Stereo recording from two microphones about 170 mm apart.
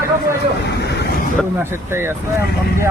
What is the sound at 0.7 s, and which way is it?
Speech, 75° left (ahead or behind).